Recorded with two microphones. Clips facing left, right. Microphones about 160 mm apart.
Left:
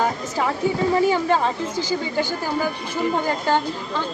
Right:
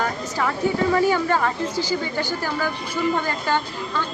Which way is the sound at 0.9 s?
20° left (ahead or behind).